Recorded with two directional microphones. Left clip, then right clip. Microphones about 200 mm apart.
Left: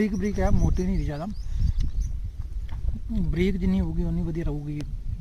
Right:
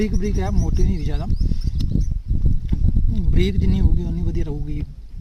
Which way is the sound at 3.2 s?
10° right (ahead or behind).